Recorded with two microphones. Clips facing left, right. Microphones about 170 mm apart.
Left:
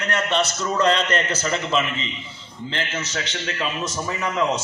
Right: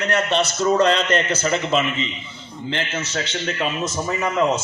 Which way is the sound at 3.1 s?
45° right (ahead or behind).